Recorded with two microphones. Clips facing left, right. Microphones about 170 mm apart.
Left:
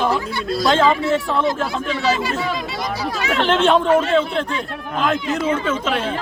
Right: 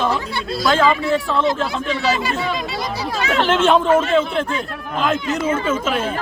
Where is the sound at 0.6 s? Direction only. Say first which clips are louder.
Even; 25° left (ahead or behind).